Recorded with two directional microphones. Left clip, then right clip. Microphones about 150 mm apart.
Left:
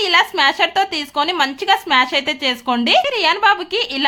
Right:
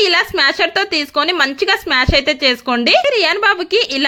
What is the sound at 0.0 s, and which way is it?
A woman's voice, 20° right (ahead or behind).